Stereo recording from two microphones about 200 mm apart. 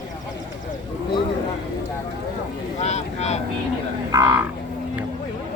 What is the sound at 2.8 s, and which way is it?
Vehicle, 35° left (ahead or behind).